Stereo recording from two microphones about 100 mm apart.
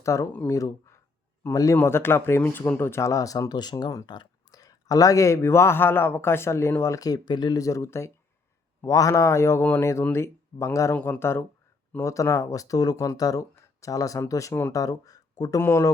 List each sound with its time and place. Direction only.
0.0 s speech: 30° left (ahead or behind)
15.6 s speech: 25° left (ahead or behind)